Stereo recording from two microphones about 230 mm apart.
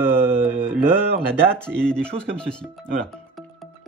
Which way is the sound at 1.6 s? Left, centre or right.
Centre.